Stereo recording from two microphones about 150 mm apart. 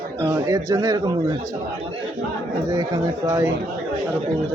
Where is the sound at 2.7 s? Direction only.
25° right (ahead or behind).